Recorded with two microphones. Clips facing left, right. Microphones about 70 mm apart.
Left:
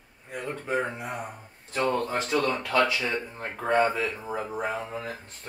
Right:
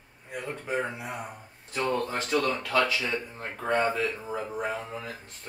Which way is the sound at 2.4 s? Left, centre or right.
Centre.